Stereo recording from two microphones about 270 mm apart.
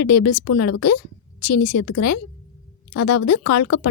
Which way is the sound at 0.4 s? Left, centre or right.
Left.